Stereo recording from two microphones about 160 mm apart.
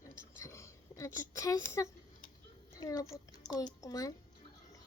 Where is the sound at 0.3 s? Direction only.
15° left (ahead or behind).